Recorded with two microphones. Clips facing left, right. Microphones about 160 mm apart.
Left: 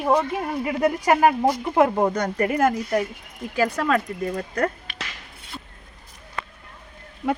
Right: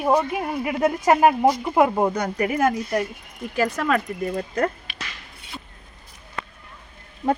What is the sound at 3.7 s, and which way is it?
Speech, 30° left (ahead or behind).